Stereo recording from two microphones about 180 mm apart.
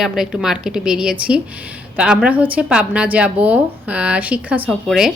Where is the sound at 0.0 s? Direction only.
Centre (ahead or behind).